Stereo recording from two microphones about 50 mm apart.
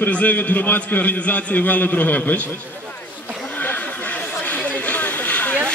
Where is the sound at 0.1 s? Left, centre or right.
Left.